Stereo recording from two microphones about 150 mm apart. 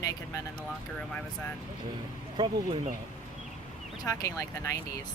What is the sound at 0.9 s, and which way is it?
Speech, 5° left (ahead or behind).